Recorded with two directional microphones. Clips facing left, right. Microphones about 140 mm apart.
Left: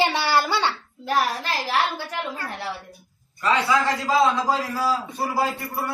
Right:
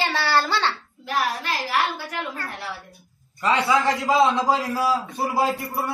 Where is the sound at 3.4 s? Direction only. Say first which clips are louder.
Right 1 dB; 20° right (ahead or behind).